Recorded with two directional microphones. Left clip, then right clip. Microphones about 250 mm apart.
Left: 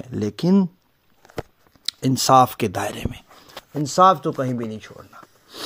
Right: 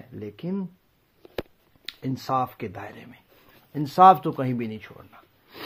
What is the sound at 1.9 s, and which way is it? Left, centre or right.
Speech, left.